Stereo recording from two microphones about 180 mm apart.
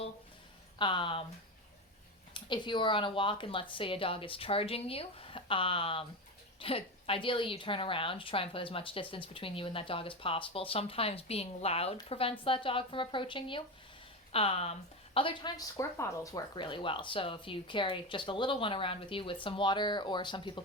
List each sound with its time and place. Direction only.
0.8 s a woman's voice: 25° left (ahead or behind)
2.3 s a woman's voice: 25° left (ahead or behind)